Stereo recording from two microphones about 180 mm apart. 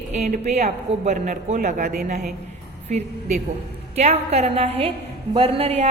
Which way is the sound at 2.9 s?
40° right (ahead or behind).